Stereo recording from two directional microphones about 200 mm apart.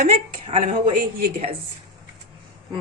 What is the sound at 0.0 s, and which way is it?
Speech, 35° right (ahead or behind).